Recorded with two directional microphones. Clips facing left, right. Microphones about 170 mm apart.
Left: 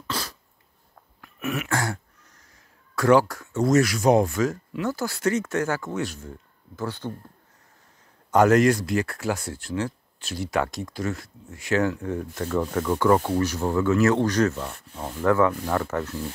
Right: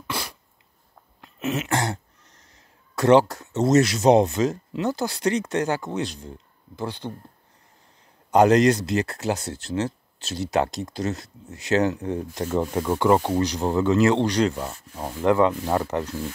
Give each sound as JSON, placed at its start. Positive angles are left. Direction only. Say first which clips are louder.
{"t": 0.0, "sound": "cough", "louder": "even", "side_deg": -15}
{"t": 1.2, "sound": "throat clearing", "louder": "right 2 dB", "side_deg": -20}
{"t": 3.0, "sound": "speech", "louder": "right 2 dB", "side_deg": -25}
{"t": 8.3, "sound": "speech", "louder": "right 1 dB", "side_deg": -15}